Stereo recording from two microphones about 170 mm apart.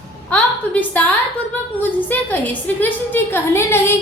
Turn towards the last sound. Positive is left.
turn(degrees=15)  # may be behind; listen again after turning